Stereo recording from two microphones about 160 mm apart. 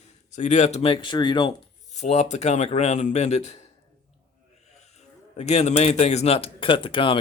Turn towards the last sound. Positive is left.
turn(degrees=30)  # may be behind; listen again after turning